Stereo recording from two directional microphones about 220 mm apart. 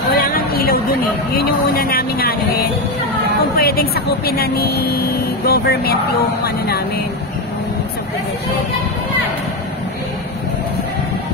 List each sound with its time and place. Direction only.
0.1 s a sound: 45° left (ahead or behind)
1.3 s speech: 45° left (ahead or behind)
3.5 s speech: 45° left (ahead or behind)